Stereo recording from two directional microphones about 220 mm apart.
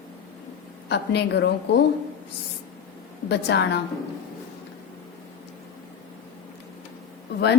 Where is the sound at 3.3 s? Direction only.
50° left (ahead or behind).